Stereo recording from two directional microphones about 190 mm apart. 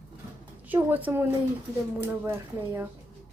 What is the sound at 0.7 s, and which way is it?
A woman's voice, 10° right (ahead or behind).